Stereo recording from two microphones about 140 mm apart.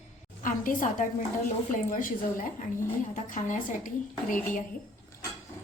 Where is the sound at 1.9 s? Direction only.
75° left (ahead or behind).